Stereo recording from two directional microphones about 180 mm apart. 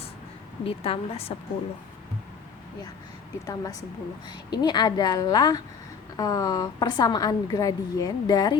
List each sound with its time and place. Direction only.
0.6 s a woman's voice: 30° left (ahead or behind)
3.4 s a woman's voice: 20° left (ahead or behind)